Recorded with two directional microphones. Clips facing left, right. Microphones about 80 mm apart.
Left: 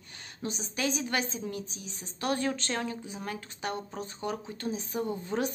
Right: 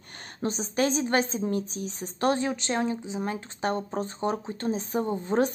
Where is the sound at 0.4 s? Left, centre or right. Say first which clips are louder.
Right 7 dB; right.